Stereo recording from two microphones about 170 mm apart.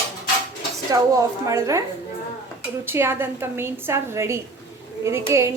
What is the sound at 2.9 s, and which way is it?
A woman's voice, 15° right (ahead or behind).